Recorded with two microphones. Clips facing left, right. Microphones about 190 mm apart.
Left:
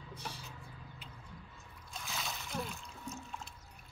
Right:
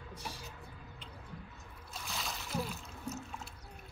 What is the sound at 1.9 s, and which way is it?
Splash, centre (ahead or behind).